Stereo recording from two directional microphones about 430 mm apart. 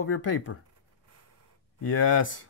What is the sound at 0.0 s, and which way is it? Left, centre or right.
Speech, left.